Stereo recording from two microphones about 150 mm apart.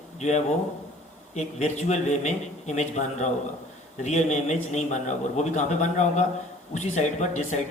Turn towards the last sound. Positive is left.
turn(degrees=50)  # may be behind; listen again after turning